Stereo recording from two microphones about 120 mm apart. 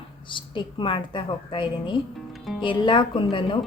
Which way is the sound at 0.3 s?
45° left (ahead or behind).